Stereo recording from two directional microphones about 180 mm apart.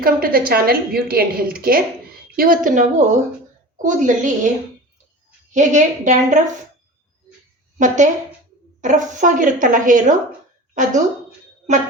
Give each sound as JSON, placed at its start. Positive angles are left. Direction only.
{"t": 0.0, "sound": "a woman's voice", "side_deg": -55}
{"t": 5.5, "sound": "a woman's voice", "side_deg": -45}
{"t": 7.8, "sound": "a woman's voice", "side_deg": -45}